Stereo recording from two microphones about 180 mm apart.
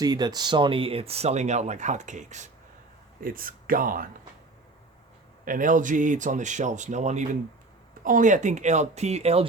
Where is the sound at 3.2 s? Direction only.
55° right (ahead or behind).